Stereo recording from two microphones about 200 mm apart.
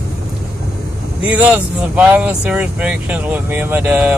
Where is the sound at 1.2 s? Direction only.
5° right (ahead or behind).